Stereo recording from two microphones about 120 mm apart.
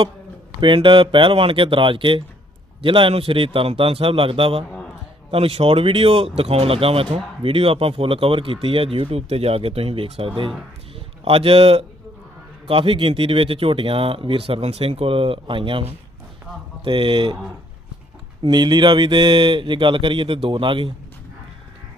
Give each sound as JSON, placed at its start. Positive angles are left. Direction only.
{"t": 0.6, "sound": "a man's voice", "side_deg": -45}
{"t": 18.4, "sound": "speech", "side_deg": -35}